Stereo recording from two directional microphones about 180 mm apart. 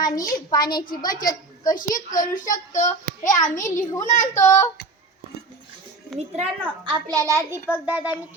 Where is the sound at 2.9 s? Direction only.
20° left (ahead or behind).